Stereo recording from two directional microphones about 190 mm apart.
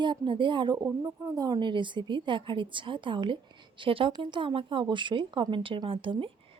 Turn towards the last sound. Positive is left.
turn(degrees=-25)  # may be behind; listen again after turning